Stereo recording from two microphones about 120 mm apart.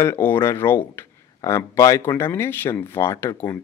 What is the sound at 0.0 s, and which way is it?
Speech, 20° left (ahead or behind).